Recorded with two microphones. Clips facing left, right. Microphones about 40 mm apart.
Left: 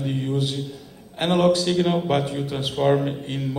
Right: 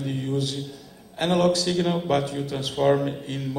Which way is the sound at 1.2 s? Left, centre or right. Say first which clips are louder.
Left 2 dB; left.